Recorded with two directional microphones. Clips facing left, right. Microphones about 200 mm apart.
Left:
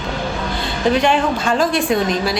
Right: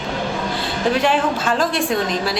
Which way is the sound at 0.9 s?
5° right (ahead or behind).